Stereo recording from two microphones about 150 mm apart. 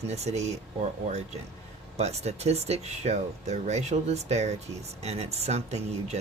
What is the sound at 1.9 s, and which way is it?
Speech, 45° right (ahead or behind).